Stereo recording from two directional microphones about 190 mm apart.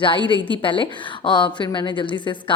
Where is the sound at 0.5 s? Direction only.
25° left (ahead or behind).